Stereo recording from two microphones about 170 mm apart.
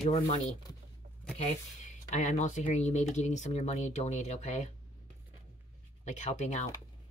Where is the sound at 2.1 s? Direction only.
45° left (ahead or behind).